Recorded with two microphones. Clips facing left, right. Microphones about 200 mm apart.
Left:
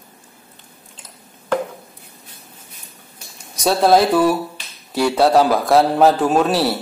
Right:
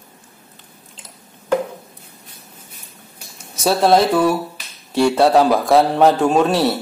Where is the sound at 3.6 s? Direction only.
Centre (ahead or behind).